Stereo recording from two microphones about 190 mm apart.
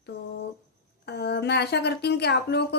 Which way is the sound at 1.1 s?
60° left (ahead or behind).